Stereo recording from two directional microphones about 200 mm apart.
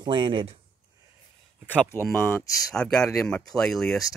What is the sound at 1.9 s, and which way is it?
Speech, 10° left (ahead or behind).